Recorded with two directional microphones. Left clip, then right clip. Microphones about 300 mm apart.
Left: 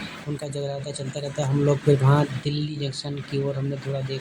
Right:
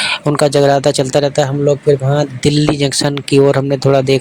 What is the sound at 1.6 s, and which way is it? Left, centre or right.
Speech, centre.